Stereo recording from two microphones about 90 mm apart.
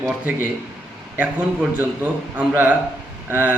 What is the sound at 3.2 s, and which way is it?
Speech, 25° right (ahead or behind).